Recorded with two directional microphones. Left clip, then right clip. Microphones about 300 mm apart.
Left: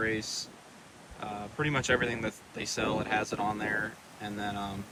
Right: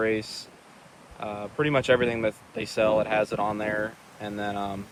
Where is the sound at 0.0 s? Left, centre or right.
Centre.